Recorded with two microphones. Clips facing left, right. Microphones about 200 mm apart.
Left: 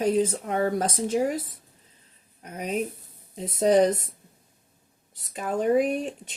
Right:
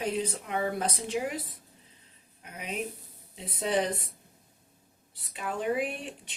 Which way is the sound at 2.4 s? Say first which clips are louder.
Left 7 dB; 45° left (ahead or behind).